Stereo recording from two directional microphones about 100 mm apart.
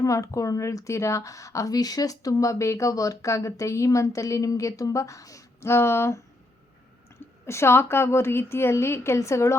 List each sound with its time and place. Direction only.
0.0 s a woman's voice: 30° left (ahead or behind)
7.4 s a woman's voice: 25° left (ahead or behind)